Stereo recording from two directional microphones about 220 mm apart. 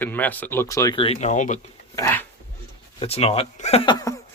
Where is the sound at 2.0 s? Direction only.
10° left (ahead or behind).